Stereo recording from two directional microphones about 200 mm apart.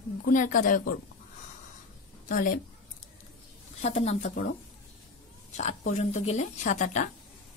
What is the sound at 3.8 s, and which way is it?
Speech, 30° left (ahead or behind).